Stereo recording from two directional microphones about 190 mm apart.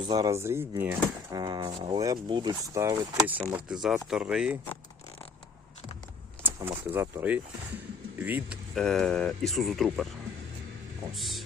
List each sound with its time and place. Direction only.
0.1 s speech: 15° right (ahead or behind)
1.4 s speech: 20° right (ahead or behind)
3.8 s speech: centre (ahead or behind)
6.4 s speech: 10° right (ahead or behind)
8.7 s speech: centre (ahead or behind)
11.1 s speech: centre (ahead or behind)